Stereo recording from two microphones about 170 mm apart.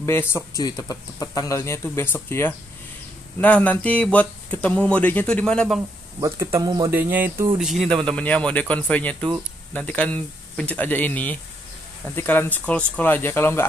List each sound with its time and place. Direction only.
0.0 s speech: 15° left (ahead or behind)
6.2 s speech: 15° right (ahead or behind)
6.9 s speech: 10° right (ahead or behind); by 13.7 s 15° left (ahead or behind)